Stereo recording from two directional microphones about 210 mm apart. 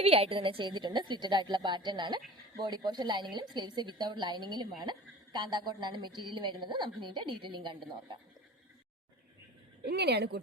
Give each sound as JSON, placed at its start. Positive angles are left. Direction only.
{"t": 0.0, "sound": "a woman's voice", "side_deg": -30}
{"t": 9.8, "sound": "a woman's voice", "side_deg": -50}